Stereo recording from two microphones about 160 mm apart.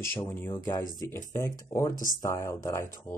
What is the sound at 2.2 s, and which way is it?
Speech, 15° left (ahead or behind).